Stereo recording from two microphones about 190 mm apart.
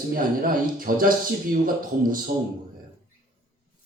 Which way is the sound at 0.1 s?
50° right (ahead or behind).